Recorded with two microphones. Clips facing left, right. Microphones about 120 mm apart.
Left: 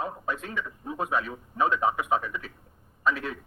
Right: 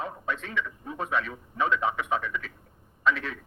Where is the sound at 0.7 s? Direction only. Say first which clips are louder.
Left 2 dB; 25° left (ahead or behind).